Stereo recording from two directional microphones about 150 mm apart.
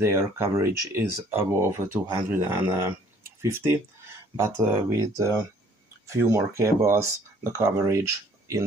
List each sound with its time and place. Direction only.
0.0 s speech: 15° right (ahead or behind)